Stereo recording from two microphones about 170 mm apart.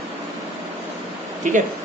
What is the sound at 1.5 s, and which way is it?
Speech, 45° right (ahead or behind).